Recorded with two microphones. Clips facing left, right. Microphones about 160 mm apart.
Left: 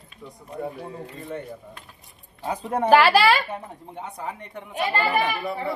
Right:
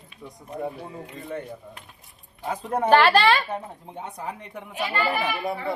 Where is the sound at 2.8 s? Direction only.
5° left (ahead or behind).